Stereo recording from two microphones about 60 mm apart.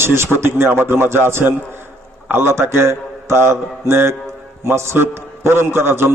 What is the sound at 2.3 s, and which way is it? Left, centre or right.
Mantra, right.